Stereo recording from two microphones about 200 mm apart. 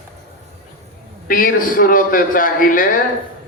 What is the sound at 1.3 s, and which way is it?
A man's voice, 45° left (ahead or behind).